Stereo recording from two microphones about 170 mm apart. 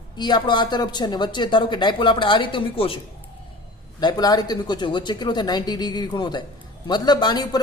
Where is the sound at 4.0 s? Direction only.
25° left (ahead or behind).